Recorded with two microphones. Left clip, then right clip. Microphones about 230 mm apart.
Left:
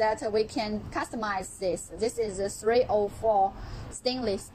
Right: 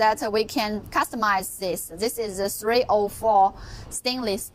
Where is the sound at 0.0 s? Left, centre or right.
Right.